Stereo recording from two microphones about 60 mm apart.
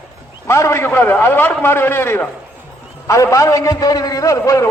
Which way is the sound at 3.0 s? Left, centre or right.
Left.